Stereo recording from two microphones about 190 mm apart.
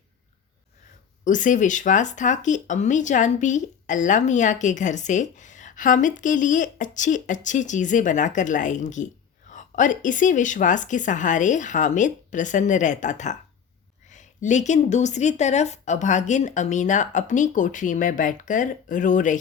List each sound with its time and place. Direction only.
1.2 s speech: 40° left (ahead or behind)